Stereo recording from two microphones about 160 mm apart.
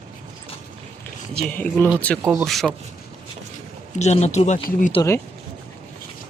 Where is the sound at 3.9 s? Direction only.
45° left (ahead or behind).